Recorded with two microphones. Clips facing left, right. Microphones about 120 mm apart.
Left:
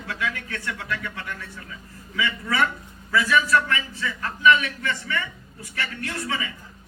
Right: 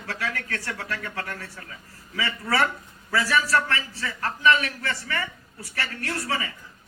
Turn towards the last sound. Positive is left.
turn(degrees=-40)  # may be behind; listen again after turning